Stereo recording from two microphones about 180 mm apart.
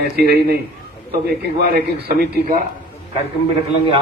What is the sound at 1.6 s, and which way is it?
Speech, 60° right (ahead or behind).